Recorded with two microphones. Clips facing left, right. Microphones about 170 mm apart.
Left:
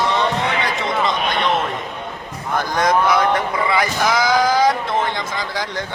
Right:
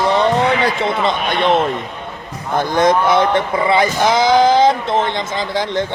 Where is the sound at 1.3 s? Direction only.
30° right (ahead or behind).